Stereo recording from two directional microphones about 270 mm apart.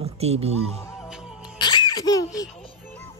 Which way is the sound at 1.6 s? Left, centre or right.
Centre.